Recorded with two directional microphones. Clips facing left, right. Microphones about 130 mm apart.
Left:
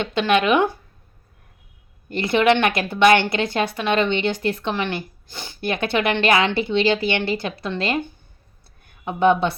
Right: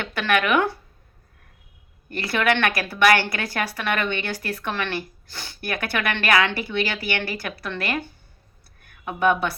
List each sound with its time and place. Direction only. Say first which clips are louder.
0.0 s a woman's voice: left 4 dB; 20° left (ahead or behind)
2.0 s a woman's voice: left 5 dB; 20° left (ahead or behind)